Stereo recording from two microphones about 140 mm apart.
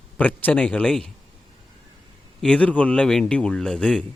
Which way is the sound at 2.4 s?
10° left (ahead or behind).